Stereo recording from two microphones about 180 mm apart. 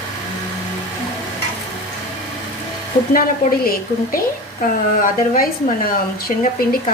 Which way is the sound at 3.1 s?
55° left (ahead or behind).